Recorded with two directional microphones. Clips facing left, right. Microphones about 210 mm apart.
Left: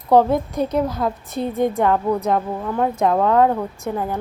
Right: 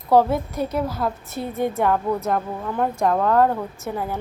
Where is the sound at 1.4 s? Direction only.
15° left (ahead or behind).